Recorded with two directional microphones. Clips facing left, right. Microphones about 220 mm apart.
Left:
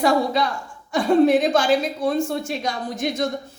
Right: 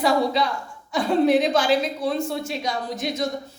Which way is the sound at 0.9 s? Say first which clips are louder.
Left 3 dB; 45° left (ahead or behind).